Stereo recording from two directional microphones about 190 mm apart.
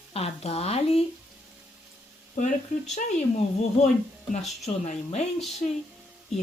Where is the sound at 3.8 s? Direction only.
35° left (ahead or behind).